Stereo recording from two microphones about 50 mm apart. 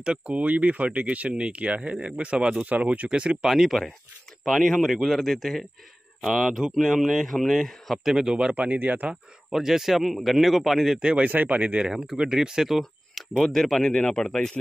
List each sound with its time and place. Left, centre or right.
0.0 s speech: right
3.4 s speech: centre
8.3 s speech: centre
8.5 s speech: right
9.1 s speech: centre
11.0 s speech: centre
11.2 s speech: right
12.0 s speech: centre